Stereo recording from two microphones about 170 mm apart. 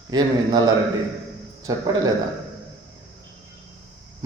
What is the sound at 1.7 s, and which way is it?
Speech, 20° right (ahead or behind).